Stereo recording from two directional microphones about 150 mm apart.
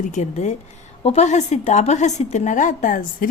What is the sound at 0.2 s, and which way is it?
A woman's voice, 50° left (ahead or behind).